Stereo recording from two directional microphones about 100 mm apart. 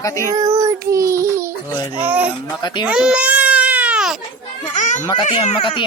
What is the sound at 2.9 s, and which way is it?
Baby cry, 10° right (ahead or behind).